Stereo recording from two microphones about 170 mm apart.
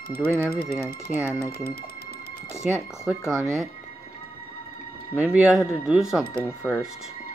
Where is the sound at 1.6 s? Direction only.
65° left (ahead or behind).